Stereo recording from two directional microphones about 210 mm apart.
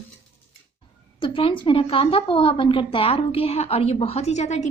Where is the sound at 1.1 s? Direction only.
25° left (ahead or behind).